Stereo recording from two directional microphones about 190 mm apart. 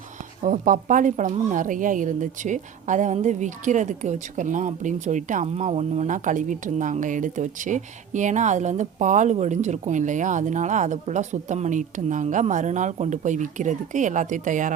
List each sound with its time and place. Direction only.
0.4 s a woman's voice: 45° right (ahead or behind)